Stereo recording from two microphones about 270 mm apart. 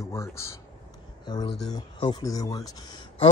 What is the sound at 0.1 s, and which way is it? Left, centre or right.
Speech, centre.